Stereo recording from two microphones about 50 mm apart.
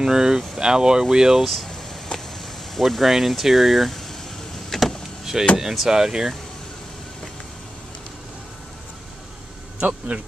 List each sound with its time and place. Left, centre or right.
0.0 s speech: centre
1.5 s speech: centre
4.6 s power windows: centre
5.2 s door: centre
5.6 s speech: centre
9.8 s speech: right